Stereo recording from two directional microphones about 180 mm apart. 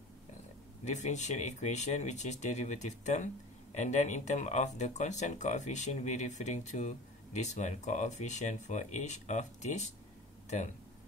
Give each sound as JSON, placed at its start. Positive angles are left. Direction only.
{"t": 0.8, "sound": "speech", "side_deg": 40}